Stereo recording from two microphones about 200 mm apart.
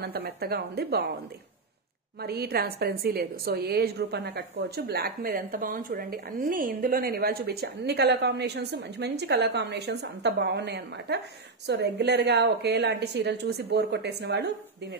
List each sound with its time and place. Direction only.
0.0 s a woman's voice: 50° right (ahead or behind)
2.2 s a woman's voice: 50° right (ahead or behind)